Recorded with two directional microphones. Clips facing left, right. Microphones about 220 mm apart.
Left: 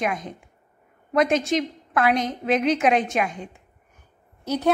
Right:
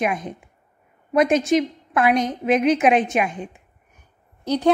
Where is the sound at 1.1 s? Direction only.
20° right (ahead or behind).